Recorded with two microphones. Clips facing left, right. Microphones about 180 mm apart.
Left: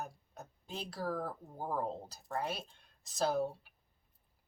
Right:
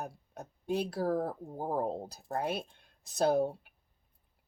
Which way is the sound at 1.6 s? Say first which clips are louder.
Right 4 dB; 40° right (ahead or behind).